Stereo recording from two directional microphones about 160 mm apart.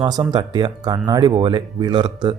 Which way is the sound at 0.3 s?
25° right (ahead or behind).